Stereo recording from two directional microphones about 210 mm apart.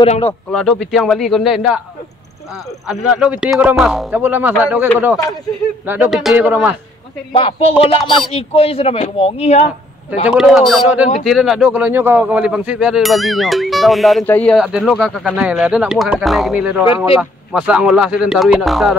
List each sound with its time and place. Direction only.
0.0 s speech: 25° left (ahead or behind)
0.3 s speech: 5° left (ahead or behind)
2.9 s speech: 5° right (ahead or behind)
5.9 s a man's voice: 5° right (ahead or behind)
7.3 s speech: 25° left (ahead or behind)
10.2 s speech: 5° right (ahead or behind)
16.8 s speech: 25° left (ahead or behind)
17.2 s speech: 5° right (ahead or behind)